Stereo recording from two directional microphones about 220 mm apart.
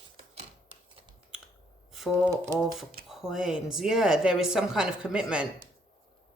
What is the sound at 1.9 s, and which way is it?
Speech, centre (ahead or behind).